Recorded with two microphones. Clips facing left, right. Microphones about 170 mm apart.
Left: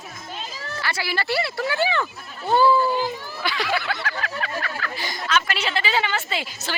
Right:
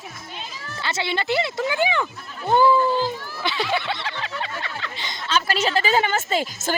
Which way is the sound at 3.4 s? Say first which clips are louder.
Right 1 dB; 20° right (ahead or behind).